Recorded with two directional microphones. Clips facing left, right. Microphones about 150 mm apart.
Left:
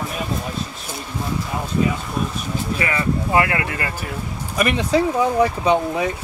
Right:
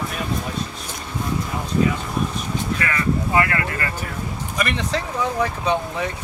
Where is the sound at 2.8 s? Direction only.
15° left (ahead or behind).